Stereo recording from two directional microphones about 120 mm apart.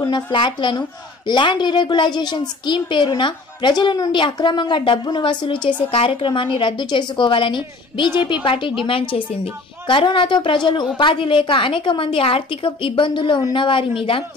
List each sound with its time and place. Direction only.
0.1 s a woman's voice: 40° left (ahead or behind)